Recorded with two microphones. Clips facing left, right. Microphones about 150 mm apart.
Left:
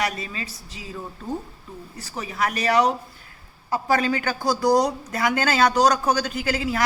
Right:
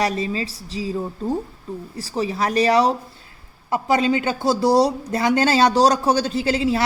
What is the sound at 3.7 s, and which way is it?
Speech, 20° right (ahead or behind).